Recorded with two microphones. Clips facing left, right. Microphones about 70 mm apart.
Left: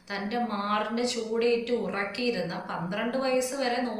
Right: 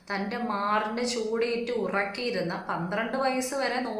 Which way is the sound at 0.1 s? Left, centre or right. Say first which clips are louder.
Even; right.